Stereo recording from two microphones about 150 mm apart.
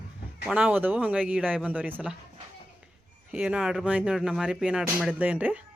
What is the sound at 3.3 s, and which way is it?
Speech, 10° right (ahead or behind).